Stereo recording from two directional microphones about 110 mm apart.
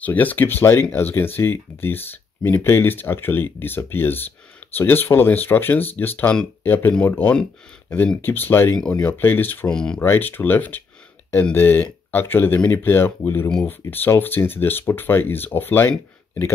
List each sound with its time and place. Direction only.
0.0 s speech: 15° left (ahead or behind)
9.8 s speech: 5° left (ahead or behind)
10.0 s speech: 20° left (ahead or behind)